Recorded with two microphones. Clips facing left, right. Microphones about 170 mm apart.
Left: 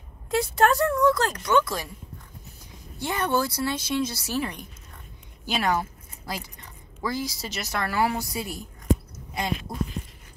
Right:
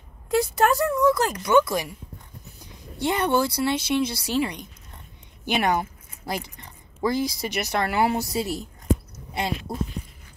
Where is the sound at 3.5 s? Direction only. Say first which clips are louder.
Right 4 dB; 10° right (ahead or behind).